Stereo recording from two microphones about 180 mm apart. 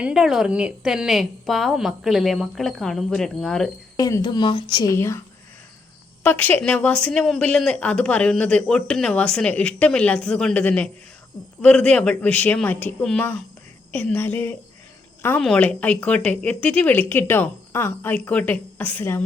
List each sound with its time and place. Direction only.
0.0 s a woman's voice: 5° right (ahead or behind)
3.9 s speech: 20° left (ahead or behind)
6.2 s a woman's voice: 10° left (ahead or behind)